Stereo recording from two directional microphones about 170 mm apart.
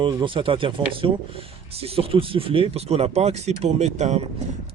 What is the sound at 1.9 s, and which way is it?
Speech, 35° right (ahead or behind).